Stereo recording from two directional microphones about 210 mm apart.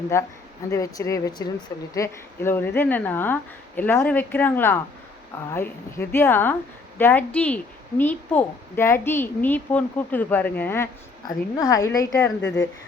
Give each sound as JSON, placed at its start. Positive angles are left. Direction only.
{"t": 0.1, "sound": "a woman's voice", "side_deg": 15}
{"t": 12.4, "sound": "speech", "side_deg": 60}